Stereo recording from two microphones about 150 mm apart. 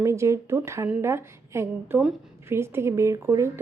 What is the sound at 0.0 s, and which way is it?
A woman's voice, 20° right (ahead or behind).